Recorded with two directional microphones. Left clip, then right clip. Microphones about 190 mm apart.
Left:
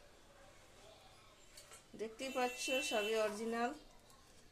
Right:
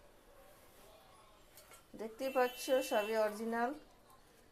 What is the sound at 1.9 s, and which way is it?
Speech, 15° right (ahead or behind).